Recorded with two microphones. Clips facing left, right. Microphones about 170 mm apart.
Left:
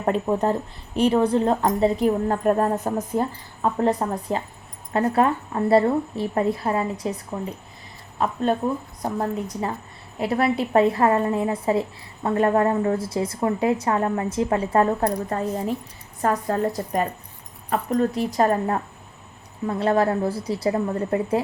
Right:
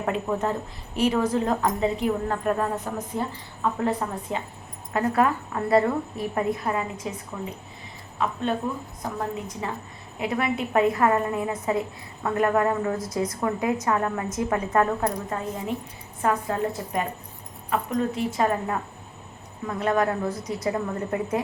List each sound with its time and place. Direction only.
0.0 s a woman's voice: 35° left (ahead or behind)
8.2 s a woman's voice: 40° left (ahead or behind)